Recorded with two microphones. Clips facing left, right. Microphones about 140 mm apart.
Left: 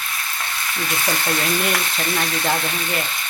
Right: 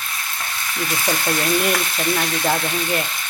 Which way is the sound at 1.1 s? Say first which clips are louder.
Right 3 dB; centre (ahead or behind).